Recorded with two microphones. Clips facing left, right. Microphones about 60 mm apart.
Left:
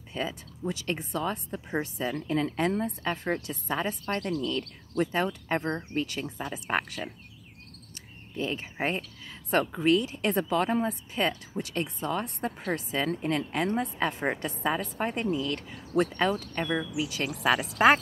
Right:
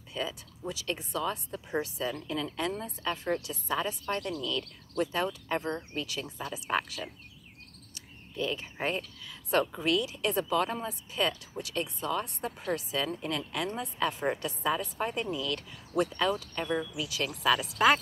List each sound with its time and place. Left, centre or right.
0.1 s speech: left
8.4 s speech: left